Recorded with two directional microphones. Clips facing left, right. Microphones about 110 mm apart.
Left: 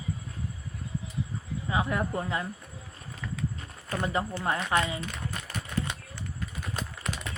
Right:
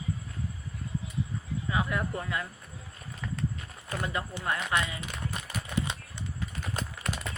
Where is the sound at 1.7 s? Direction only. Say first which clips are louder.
Left 2 dB; 25° left (ahead or behind).